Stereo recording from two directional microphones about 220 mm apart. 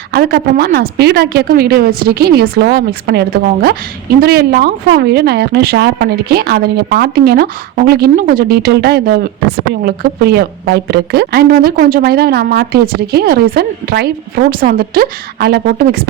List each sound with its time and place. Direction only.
0.1 s a woman's voice: 45° right (ahead or behind)